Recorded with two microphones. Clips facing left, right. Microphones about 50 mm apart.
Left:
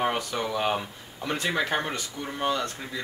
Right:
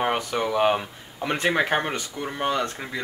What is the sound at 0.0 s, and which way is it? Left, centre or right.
Speech, right.